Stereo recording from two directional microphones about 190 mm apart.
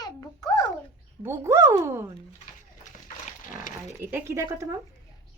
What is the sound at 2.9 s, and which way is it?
Splash, 40° left (ahead or behind).